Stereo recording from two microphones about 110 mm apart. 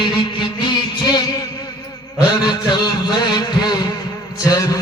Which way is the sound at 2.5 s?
40° left (ahead or behind).